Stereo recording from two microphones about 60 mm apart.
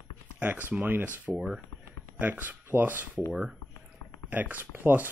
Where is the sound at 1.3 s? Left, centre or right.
Centre.